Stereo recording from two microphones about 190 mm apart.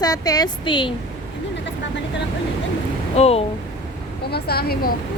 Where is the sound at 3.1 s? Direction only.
35° left (ahead or behind).